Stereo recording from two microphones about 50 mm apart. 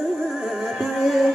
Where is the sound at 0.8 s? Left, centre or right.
Centre.